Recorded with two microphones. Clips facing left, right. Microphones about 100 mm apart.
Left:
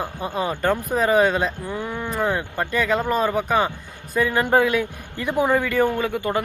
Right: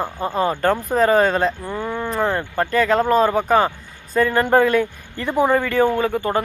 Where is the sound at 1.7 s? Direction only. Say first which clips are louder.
Right 3 dB; 30° right (ahead or behind).